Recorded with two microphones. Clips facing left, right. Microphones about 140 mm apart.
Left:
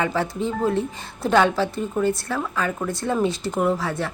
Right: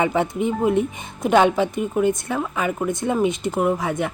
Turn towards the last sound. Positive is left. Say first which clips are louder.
# right 2 dB
turn(degrees=-15)  # may be behind; listen again after turning